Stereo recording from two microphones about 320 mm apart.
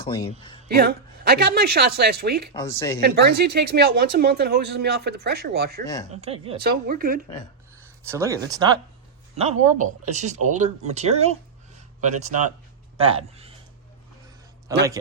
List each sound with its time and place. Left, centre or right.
0.0 s speech: centre
0.7 s speech: right
2.5 s speech: centre
3.0 s speech: right
6.1 s speech: centre
6.6 s speech: right
7.8 s speech: centre
13.0 s speech: centre
14.7 s speech: centre